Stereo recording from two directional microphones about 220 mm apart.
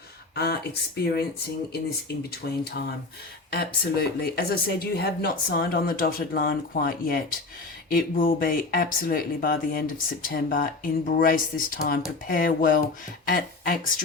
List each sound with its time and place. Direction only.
0.3 s speech: 45° left (ahead or behind)
2.4 s speech: 45° left (ahead or behind)